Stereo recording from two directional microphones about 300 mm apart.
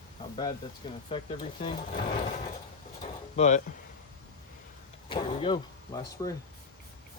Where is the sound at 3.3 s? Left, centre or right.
Left.